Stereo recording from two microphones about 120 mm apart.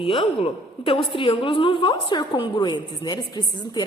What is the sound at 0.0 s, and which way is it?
A woman's voice, 45° left (ahead or behind).